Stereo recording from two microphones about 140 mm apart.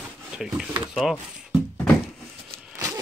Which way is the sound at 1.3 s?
5° right (ahead or behind).